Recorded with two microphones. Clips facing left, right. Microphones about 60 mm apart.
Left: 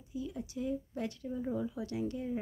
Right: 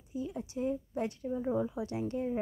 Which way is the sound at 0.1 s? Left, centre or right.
Right.